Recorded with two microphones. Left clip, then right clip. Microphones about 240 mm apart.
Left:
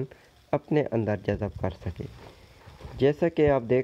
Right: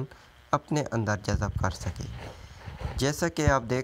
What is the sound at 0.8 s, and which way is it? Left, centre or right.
Speech, right.